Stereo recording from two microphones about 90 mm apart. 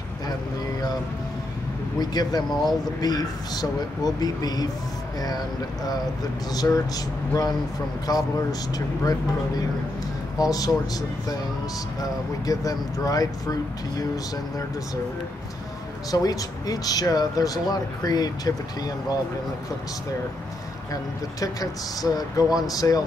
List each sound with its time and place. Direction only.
2.0 s speech: 50° left (ahead or behind)
6.5 s speech: 45° left (ahead or behind)
8.1 s speech: 45° left (ahead or behind)
10.4 s speech: 45° left (ahead or behind)
16.1 s speech: 45° left (ahead or behind)
20.9 s speech: 40° left (ahead or behind)